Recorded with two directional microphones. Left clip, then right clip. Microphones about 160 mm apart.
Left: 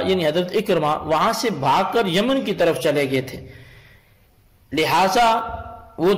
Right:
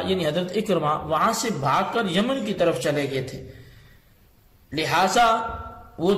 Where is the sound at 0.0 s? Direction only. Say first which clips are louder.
Left 5 dB; 35° left (ahead or behind).